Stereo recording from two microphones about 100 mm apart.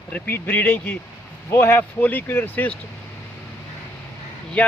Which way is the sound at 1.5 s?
25° left (ahead or behind).